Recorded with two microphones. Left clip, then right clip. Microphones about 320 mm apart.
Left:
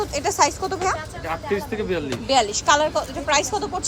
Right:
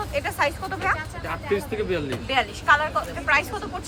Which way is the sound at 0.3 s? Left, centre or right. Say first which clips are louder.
Left 7 dB; centre.